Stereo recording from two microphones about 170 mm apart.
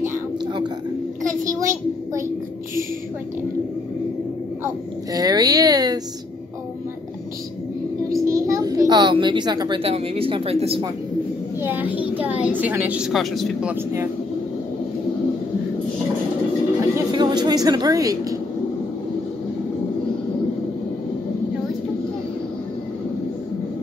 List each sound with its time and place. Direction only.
1.2 s a child's voice: 20° right (ahead or behind)
5.1 s a sound: 20° right (ahead or behind)
8.1 s a child's voice: 20° right (ahead or behind); by 10.8 s 35° right (ahead or behind)
11.6 s a woman's voice: 10° right (ahead or behind)
16.9 s speech: 25° right (ahead or behind)